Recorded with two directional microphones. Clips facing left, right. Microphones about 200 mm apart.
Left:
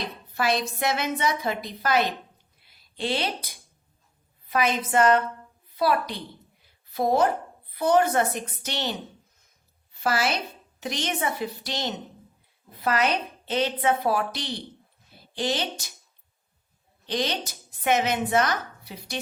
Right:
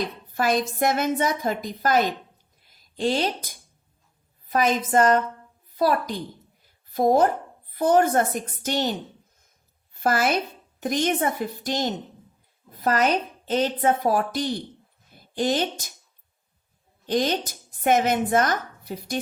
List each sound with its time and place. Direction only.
0.0 s a woman's voice: 45° right (ahead or behind)
15.1 s a sound: 45° right (ahead or behind)
17.1 s a woman's voice: 45° right (ahead or behind)